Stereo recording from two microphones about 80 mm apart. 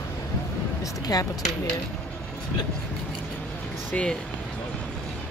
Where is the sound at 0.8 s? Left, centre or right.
Left.